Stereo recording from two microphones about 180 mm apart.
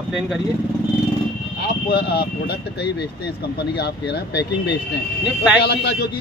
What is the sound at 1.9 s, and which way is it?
Speech, 65° left (ahead or behind).